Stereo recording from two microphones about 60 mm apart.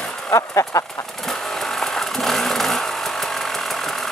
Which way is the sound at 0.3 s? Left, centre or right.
Left.